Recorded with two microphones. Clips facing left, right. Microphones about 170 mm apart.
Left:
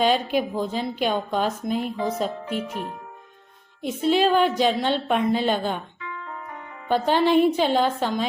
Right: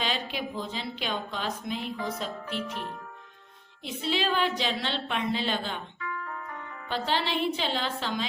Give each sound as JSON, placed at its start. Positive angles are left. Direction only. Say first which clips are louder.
{"t": 0.0, "sound": "a woman's voice", "louder": "left 11 dB", "side_deg": 50}
{"t": 6.0, "sound": "music", "louder": "even", "side_deg": 20}
{"t": 6.8, "sound": "a woman's voice", "louder": "left 10 dB", "side_deg": 50}